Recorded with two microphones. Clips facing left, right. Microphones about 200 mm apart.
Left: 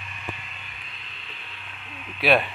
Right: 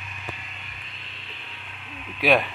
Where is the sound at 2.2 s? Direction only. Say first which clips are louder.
Even; 10° right (ahead or behind).